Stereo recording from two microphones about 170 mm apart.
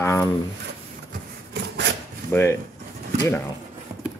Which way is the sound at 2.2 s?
15° left (ahead or behind).